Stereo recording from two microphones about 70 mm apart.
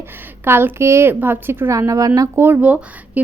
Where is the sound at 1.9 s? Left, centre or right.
Right.